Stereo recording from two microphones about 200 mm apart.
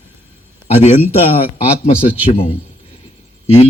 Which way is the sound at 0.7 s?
30° left (ahead or behind).